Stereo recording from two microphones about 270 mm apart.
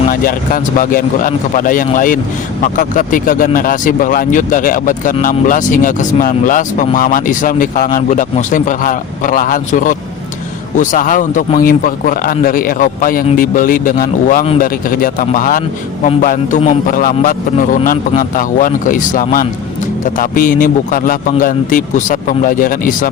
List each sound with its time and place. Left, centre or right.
0.1 s speech: left